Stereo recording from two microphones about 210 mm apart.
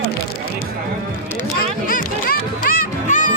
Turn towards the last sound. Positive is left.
turn(degrees=35)  # may be behind; listen again after turning